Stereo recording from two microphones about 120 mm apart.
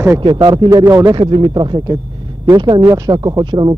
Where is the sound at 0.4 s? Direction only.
40° right (ahead or behind).